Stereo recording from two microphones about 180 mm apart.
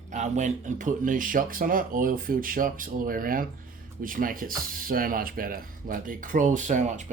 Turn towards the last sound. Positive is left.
turn(degrees=-40)  # may be behind; listen again after turning